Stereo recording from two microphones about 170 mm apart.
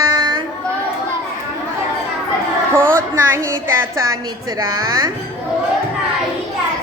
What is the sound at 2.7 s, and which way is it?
A woman's voice, 15° right (ahead or behind).